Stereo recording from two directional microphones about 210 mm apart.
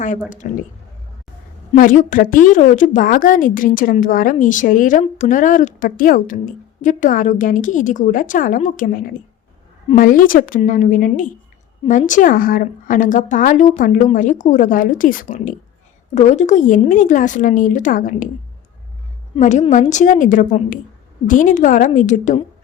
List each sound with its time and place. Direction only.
0.4 s a woman's voice: 35° left (ahead or behind)
1.7 s a woman's voice: 40° left (ahead or behind)
19.4 s a woman's voice: 35° left (ahead or behind)